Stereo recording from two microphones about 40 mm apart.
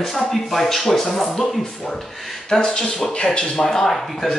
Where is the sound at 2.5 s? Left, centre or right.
Centre.